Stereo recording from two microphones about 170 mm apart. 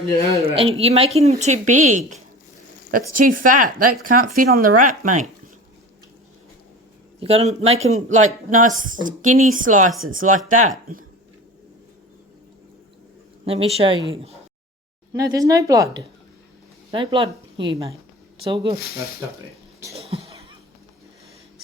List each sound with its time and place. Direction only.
0.4 s a woman's voice: 35° right (ahead or behind)
7.2 s a woman's voice: 35° right (ahead or behind)
13.4 s speech: 35° right (ahead or behind)
15.1 s a woman's voice: 20° right (ahead or behind)
19.9 s a sound: 35° right (ahead or behind)